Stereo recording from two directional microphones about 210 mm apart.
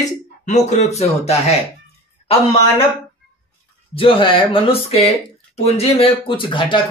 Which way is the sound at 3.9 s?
25° left (ahead or behind).